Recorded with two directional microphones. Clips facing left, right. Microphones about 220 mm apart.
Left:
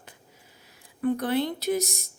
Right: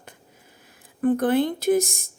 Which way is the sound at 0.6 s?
50° right (ahead or behind).